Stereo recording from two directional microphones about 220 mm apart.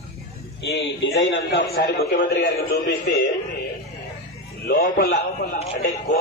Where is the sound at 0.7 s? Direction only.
55° left (ahead or behind).